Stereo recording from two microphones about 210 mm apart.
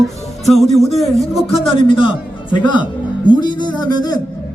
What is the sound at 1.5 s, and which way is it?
A man's voice, 25° left (ahead or behind).